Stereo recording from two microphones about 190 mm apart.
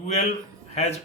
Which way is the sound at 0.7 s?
35° left (ahead or behind).